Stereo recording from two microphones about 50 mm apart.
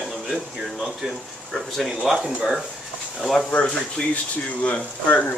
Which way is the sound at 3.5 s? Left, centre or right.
Centre.